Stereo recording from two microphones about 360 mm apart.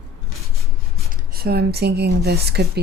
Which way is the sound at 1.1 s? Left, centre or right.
Right.